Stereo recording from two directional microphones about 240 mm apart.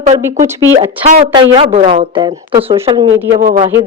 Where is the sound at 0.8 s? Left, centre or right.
Right.